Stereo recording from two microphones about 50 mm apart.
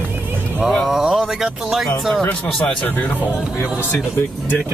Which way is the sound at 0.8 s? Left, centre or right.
Centre.